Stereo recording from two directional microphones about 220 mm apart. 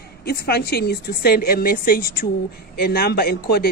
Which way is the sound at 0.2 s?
45° left (ahead or behind).